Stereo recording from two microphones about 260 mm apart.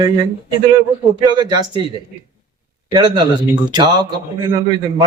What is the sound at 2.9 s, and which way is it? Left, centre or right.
Speech, centre.